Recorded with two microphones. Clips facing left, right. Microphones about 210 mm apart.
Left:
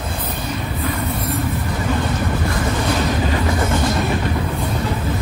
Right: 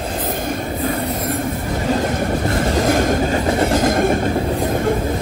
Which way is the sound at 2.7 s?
45° right (ahead or behind).